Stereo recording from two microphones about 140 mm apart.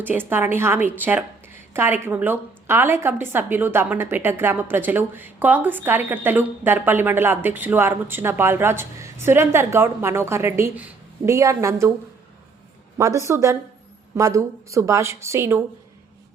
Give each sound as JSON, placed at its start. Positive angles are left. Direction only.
{"t": 0.0, "sound": "a woman's voice", "side_deg": -15}
{"t": 13.0, "sound": "a woman's voice", "side_deg": -20}